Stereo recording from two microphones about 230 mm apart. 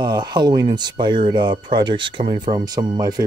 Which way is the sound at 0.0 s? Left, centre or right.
Centre.